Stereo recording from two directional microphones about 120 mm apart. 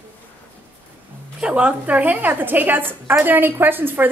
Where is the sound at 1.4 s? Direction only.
10° right (ahead or behind).